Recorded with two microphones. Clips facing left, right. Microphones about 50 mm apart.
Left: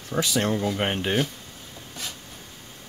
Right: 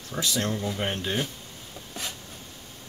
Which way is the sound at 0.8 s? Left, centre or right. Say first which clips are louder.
Left 4 dB; left.